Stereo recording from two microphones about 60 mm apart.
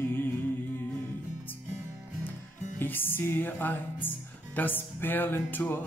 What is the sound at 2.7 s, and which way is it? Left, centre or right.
Speech, left.